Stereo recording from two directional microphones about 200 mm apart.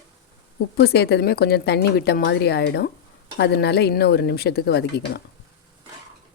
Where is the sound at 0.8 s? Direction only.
55° left (ahead or behind).